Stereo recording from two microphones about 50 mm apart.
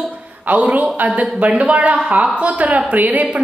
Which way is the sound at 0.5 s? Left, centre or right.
Right.